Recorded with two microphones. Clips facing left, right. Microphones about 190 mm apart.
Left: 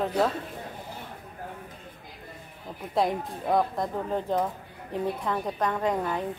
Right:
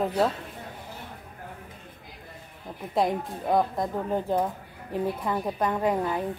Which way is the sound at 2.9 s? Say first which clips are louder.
Right 1 dB; centre (ahead or behind).